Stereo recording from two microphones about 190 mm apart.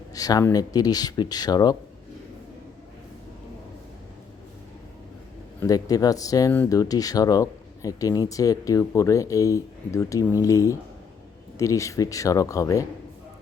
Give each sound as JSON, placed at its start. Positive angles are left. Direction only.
{"t": 0.1, "sound": "speech", "side_deg": 20}
{"t": 5.5, "sound": "speech", "side_deg": 20}